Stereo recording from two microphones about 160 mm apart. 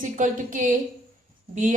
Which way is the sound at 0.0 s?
55° right (ahead or behind).